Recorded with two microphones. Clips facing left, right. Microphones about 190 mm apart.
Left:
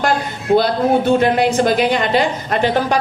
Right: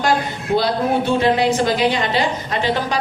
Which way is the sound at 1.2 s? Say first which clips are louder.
Left 2 dB; 50° left (ahead or behind).